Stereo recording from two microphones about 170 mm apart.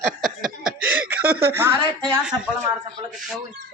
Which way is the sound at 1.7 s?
25° right (ahead or behind).